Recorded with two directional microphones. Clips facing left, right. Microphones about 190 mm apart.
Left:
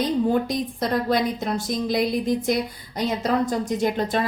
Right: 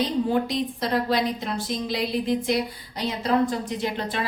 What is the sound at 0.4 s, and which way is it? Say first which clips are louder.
A woman's voice: left 1 dB; 50° left (ahead or behind).